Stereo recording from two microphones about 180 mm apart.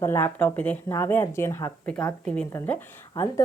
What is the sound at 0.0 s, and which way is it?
Speech, 10° left (ahead or behind).